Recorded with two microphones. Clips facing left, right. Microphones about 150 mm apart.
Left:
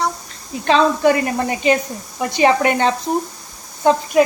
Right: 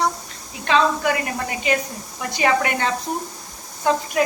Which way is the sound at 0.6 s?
30° left (ahead or behind).